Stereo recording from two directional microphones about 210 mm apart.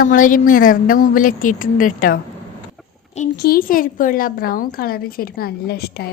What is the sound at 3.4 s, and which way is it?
A woman's voice, 45° left (ahead or behind).